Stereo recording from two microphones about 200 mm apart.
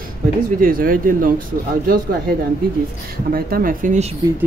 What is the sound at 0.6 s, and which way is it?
Speech, 45° right (ahead or behind).